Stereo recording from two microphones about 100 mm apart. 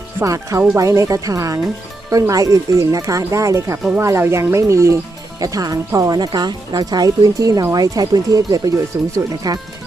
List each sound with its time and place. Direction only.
0.2 s speech: 30° right (ahead or behind)